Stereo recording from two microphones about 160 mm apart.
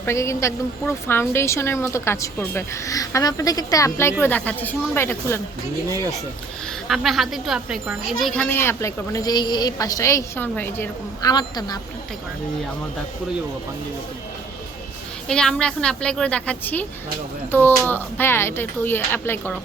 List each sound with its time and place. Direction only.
0.0 s a woman's voice: 15° left (ahead or behind)
6.8 s speech: centre (ahead or behind)
8.4 s a woman's voice: 15° left (ahead or behind)
11.2 s a woman's voice: 25° left (ahead or behind)
15.3 s a woman's voice: 5° left (ahead or behind)